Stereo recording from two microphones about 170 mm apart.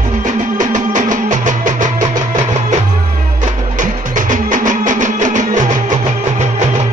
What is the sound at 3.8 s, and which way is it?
Music, 50° right (ahead or behind).